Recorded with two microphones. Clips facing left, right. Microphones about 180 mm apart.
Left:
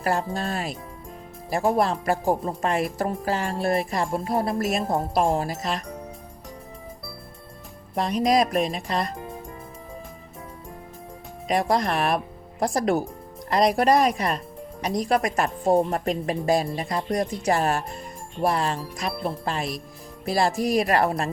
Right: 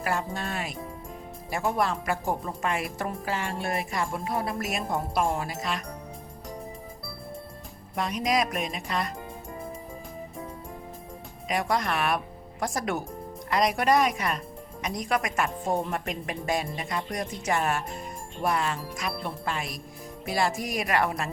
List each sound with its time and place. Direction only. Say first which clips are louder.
0.0 s speech: left 5 dB; 35° left (ahead or behind)
7.9 s speech: left 5 dB; 35° left (ahead or behind)
11.4 s speech: left 5 dB; 35° left (ahead or behind)